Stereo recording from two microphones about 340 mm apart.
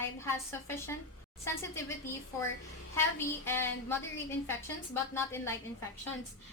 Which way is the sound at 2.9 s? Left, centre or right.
Centre.